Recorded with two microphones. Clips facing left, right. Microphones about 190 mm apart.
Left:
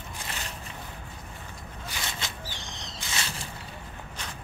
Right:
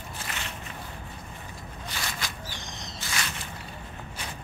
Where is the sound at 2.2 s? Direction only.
25° left (ahead or behind).